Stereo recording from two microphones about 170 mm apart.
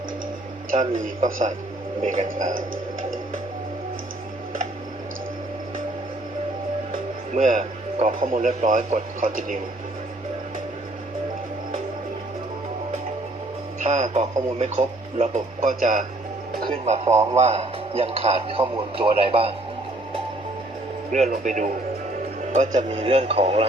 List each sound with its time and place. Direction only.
0.7 s a man's voice: 50° right (ahead or behind)
7.3 s a man's voice: 45° right (ahead or behind)
13.7 s a man's voice: 40° right (ahead or behind)
21.1 s a man's voice: 45° right (ahead or behind)
23.0 s speech: 35° right (ahead or behind)